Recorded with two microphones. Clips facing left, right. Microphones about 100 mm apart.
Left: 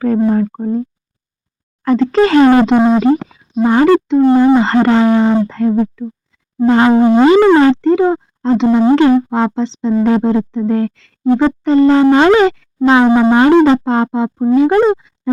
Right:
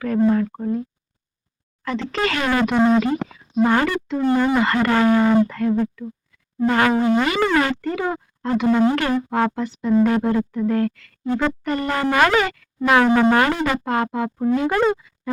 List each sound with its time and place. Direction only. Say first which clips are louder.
0.3 s speech: left 5 dB; 30° left (ahead or behind)
1.8 s speech: left 12 dB; 40° left (ahead or behind)
2.8 s speech: left 6 dB; 30° left (ahead or behind)
3.5 s speech: left 9 dB; 15° left (ahead or behind)